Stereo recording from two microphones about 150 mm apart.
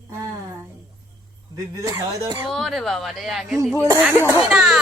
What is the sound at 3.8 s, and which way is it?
Speech, 10° right (ahead or behind).